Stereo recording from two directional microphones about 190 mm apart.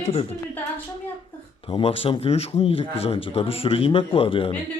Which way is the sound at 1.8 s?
30° left (ahead or behind).